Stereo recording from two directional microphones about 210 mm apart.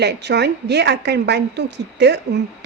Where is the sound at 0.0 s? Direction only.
55° right (ahead or behind).